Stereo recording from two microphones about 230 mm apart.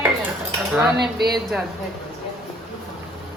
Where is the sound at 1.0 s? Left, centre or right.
Right.